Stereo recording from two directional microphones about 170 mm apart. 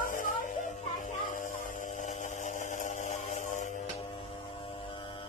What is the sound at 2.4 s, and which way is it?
Chainsaw, 50° left (ahead or behind).